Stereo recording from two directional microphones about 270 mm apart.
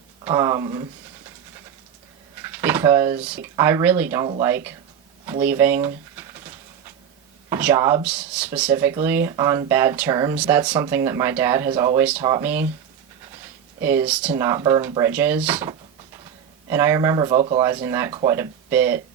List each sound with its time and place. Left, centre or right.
0.3 s speech: centre
2.4 s speech: centre
5.2 s a sound: centre
7.5 s speech: centre
13.8 s speech: centre